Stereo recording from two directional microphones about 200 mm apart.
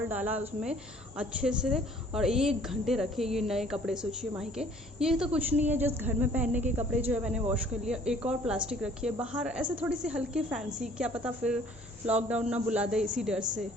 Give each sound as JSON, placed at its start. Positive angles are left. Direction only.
{"t": 0.1, "sound": "a woman's voice", "side_deg": -10}